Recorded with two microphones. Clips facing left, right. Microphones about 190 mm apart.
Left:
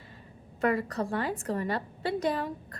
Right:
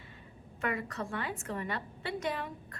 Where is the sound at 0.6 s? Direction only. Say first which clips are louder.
Left 8 dB; 35° left (ahead or behind).